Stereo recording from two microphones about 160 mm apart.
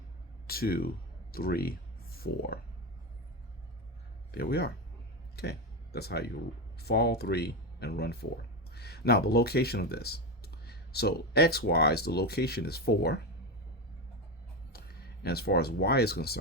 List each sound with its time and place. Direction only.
0.4 s speech: 70° left (ahead or behind)
4.3 s speech: 75° left (ahead or behind)
5.4 s speech: 85° left
14.7 s speech: 80° left